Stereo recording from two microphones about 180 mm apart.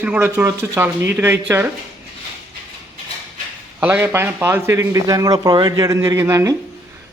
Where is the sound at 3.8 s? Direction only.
10° right (ahead or behind).